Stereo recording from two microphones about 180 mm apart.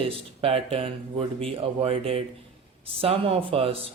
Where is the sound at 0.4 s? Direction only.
30° right (ahead or behind).